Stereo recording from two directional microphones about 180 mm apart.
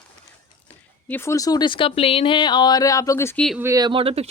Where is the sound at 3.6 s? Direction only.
20° right (ahead or behind).